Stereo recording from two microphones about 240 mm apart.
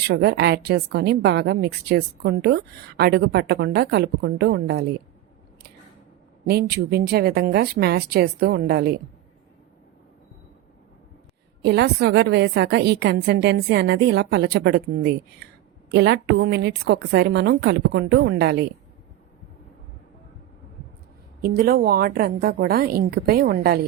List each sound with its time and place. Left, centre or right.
0.1 s a woman's voice: right
6.5 s speech: right
11.6 s a woman's voice: right
15.4 s a sound: right
15.9 s a woman's voice: right
21.4 s speech: right